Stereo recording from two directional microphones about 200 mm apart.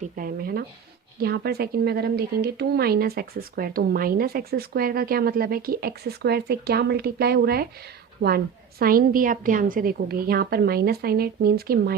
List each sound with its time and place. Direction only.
0.0 s speech: 45° right (ahead or behind)
8.8 s speech: 45° right (ahead or behind)